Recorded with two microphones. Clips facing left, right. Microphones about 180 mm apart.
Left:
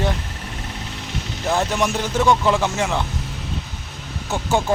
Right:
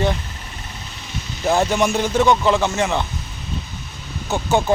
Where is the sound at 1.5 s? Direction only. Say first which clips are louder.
Right 3 dB; centre (ahead or behind).